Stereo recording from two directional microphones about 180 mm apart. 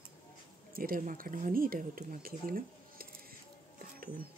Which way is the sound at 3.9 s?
55° right (ahead or behind).